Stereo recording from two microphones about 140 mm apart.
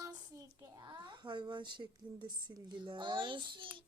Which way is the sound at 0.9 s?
35° right (ahead or behind).